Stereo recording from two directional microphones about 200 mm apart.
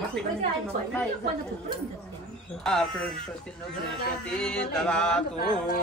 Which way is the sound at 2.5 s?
Centre (ahead or behind).